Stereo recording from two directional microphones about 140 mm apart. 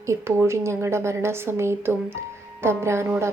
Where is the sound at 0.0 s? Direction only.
20° right (ahead or behind).